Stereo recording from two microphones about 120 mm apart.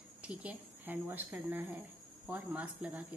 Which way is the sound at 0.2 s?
10° right (ahead or behind).